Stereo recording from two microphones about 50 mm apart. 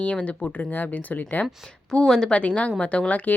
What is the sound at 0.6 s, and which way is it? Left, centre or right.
Speech, left.